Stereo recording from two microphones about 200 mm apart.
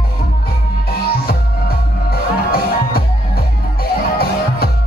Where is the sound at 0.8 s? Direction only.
50° left (ahead or behind).